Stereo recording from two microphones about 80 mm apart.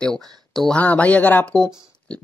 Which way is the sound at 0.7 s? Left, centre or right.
Centre.